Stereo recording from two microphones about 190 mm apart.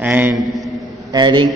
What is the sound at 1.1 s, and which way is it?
Speech, 20° right (ahead or behind).